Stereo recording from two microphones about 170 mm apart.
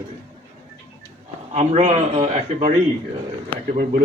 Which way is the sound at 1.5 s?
40° right (ahead or behind).